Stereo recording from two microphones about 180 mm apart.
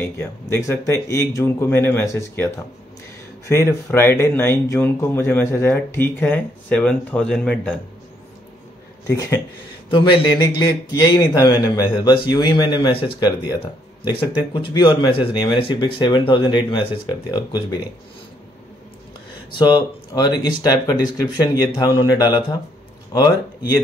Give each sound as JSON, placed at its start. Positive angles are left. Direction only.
{"t": 0.0, "sound": "speech", "side_deg": 15}
{"t": 9.0, "sound": "speech", "side_deg": 15}
{"t": 9.8, "sound": "speech", "side_deg": 25}
{"t": 19.6, "sound": "speech", "side_deg": 25}